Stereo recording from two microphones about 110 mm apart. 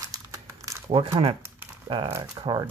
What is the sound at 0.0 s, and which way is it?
Crumpling, 30° right (ahead or behind).